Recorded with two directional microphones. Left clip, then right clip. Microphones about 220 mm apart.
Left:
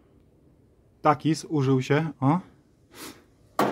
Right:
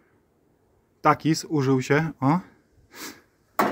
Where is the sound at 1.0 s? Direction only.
5° right (ahead or behind).